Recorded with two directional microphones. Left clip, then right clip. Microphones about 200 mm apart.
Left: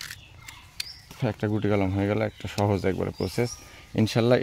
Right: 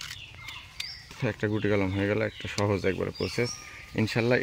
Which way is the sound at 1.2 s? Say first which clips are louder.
Left 1 dB; 50° left (ahead or behind).